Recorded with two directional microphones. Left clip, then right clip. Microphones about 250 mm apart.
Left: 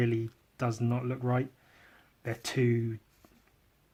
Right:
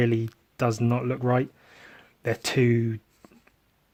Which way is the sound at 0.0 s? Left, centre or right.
Right.